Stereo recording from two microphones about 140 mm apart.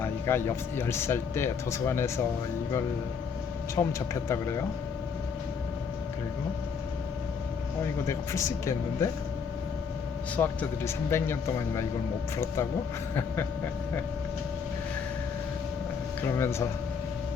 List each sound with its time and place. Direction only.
0.0 s speech: 15° left (ahead or behind)
3.8 s speech: 20° left (ahead or behind)
8.0 s speech: 20° left (ahead or behind)
10.3 s speech: 10° left (ahead or behind)
13.1 s a sound: 15° left (ahead or behind)
16.2 s speech: 20° left (ahead or behind)